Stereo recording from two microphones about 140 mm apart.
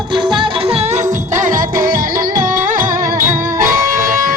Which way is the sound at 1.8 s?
85° right.